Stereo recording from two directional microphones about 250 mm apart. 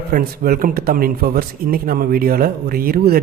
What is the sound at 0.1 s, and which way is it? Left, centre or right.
Speech, right.